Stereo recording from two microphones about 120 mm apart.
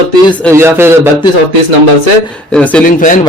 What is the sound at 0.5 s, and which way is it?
Music, 20° right (ahead or behind).